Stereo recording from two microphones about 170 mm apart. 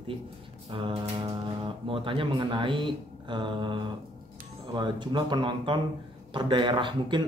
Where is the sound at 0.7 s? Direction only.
30° right (ahead or behind).